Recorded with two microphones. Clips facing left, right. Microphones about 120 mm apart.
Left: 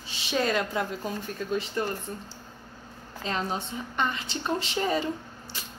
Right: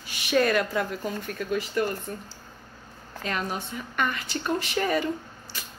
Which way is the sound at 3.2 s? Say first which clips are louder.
Even; 25° left (ahead or behind).